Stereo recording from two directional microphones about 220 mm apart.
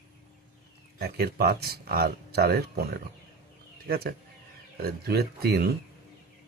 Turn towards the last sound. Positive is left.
turn(degrees=-45)  # may be behind; listen again after turning